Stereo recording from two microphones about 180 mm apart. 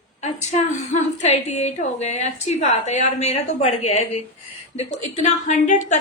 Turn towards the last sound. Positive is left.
turn(degrees=40)  # may be behind; listen again after turning